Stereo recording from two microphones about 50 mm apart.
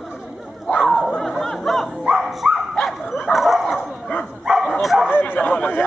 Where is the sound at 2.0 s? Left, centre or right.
Centre.